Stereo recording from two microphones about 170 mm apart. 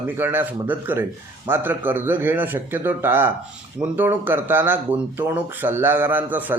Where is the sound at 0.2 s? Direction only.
10° right (ahead or behind).